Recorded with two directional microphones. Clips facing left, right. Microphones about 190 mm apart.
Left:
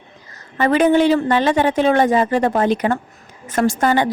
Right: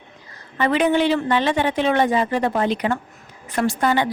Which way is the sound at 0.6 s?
40° left (ahead or behind).